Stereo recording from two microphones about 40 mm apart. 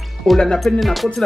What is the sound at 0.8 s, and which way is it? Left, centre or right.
Music, centre.